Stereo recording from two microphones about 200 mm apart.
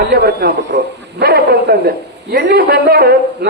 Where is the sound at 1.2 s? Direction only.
50° right (ahead or behind).